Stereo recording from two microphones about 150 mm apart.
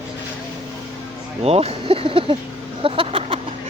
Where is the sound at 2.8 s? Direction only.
40° right (ahead or behind).